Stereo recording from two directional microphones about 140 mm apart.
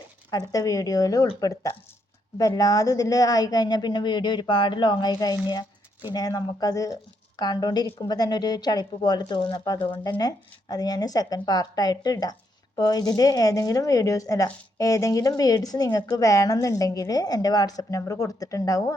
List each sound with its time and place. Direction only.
0.3 s speech: 25° left (ahead or behind)